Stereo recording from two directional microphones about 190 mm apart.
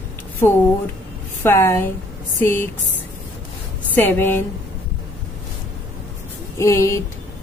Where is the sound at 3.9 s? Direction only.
10° left (ahead or behind).